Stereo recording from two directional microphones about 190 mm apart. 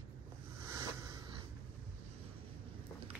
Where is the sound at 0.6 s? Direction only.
15° right (ahead or behind).